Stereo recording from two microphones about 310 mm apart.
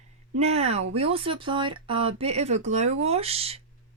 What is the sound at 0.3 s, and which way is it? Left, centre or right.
Speech, centre.